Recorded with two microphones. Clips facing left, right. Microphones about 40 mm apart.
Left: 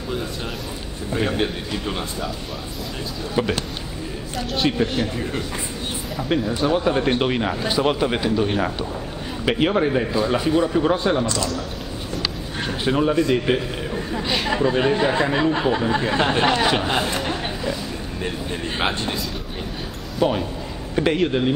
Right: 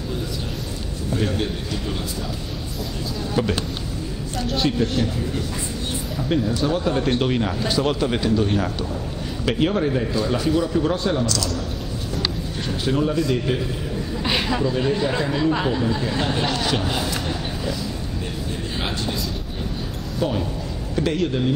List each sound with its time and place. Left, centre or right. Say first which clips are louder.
1.1 s a man's voice: left 2 dB; left
3.4 s speech: left 1 dB; centre
4.4 s a man's voice: right 1 dB; centre
4.6 s a man's voice: left 1 dB; left
6.2 s a man's voice: left 1 dB; centre
12.6 s a man's voice: left 2 dB; left
18.8 s speech: left 4 dB; left
20.2 s a man's voice: left 3 dB; left